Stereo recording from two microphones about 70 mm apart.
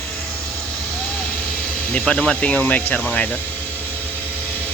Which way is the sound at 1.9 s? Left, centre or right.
Centre.